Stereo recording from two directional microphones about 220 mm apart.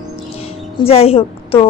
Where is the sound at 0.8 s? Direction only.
25° left (ahead or behind).